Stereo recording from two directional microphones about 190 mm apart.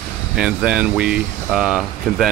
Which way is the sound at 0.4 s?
5° right (ahead or behind).